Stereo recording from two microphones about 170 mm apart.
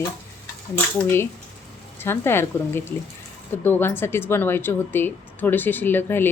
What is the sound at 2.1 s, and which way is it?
Speech, 15° left (ahead or behind).